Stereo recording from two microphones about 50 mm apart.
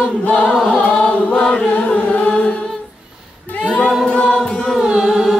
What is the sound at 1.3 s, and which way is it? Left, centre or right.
Chant, centre.